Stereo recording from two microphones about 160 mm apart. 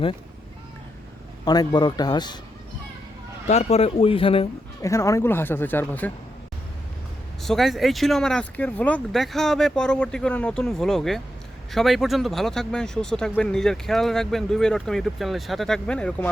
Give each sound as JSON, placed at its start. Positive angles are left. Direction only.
{"t": 1.5, "sound": "a man's voice", "side_deg": 25}
{"t": 3.4, "sound": "speech", "side_deg": 45}
{"t": 4.8, "sound": "speech", "side_deg": 20}
{"t": 7.4, "sound": "speech", "side_deg": 0}